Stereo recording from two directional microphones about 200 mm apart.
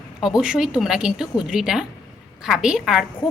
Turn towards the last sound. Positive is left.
turn(degrees=-5)  # may be behind; listen again after turning